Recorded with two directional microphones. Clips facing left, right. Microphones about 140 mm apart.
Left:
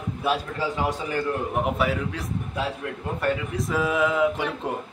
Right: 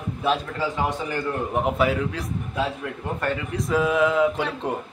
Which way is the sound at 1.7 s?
Centre (ahead or behind).